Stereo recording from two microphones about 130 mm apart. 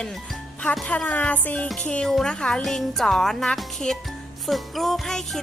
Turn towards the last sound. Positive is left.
turn(degrees=0)  # may be behind; listen again after turning